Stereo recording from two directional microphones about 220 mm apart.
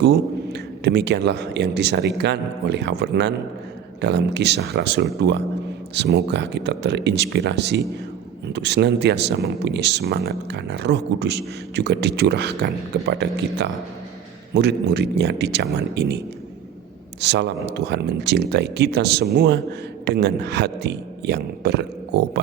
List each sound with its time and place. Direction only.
0.0 s speech: 50° right (ahead or behind)